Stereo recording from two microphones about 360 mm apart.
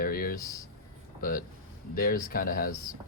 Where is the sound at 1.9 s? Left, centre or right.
Left.